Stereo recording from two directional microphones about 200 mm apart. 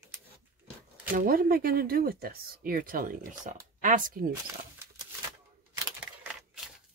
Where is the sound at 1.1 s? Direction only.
45° right (ahead or behind).